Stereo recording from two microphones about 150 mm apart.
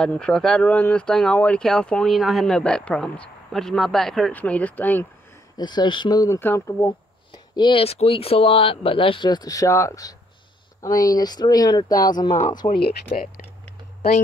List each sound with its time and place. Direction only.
0.0 s speech: 5° left (ahead or behind)
5.6 s speech: 30° left (ahead or behind)
6.9 s speech: 30° left (ahead or behind)
12.3 s speech: 55° left (ahead or behind)
12.7 s speech: 90° left